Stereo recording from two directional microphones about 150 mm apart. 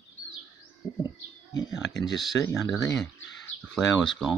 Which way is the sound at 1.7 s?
Centre (ahead or behind).